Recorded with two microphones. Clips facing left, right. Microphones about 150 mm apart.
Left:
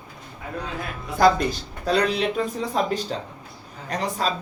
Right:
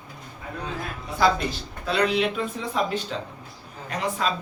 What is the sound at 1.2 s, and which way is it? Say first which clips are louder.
Speech: left 4 dB; 45° left (ahead or behind).